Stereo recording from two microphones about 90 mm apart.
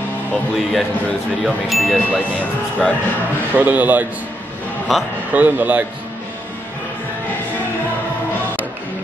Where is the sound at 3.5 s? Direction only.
20° right (ahead or behind).